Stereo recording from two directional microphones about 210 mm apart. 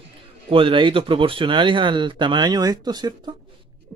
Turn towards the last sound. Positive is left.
turn(degrees=-20)  # may be behind; listen again after turning